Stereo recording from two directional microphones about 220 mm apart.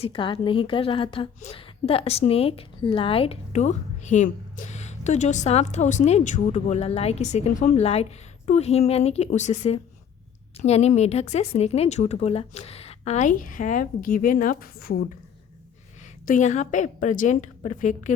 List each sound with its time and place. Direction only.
0.0 s a woman's voice: 20° left (ahead or behind); by 15.0 s 45° left (ahead or behind)
16.2 s speech: 35° left (ahead or behind)